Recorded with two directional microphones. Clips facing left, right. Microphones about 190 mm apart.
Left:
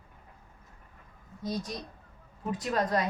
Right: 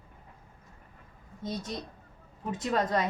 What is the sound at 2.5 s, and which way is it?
Speech, 25° right (ahead or behind).